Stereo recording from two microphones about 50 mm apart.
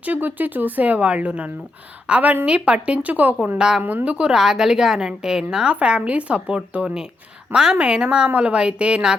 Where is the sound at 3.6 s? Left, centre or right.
Centre.